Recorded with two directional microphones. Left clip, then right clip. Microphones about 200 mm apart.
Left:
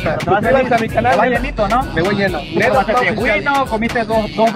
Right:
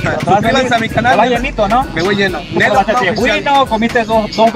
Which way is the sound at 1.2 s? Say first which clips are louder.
Right 3 dB; 15° right (ahead or behind).